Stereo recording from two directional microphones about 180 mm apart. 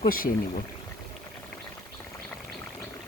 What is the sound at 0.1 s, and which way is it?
Speech, 50° left (ahead or behind).